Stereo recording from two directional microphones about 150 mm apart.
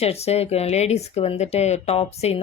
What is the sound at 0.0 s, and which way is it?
Speech, 45° left (ahead or behind).